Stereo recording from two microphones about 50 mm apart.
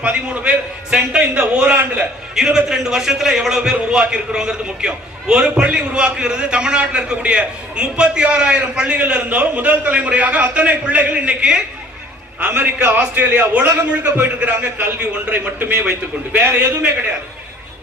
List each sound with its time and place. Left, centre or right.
0.0 s a man's voice: right
2.3 s a man's voice: centre; by 12.9 s right
13.1 s a man's voice: right
13.4 s a man's voice: right
15.9 s a man's voice: right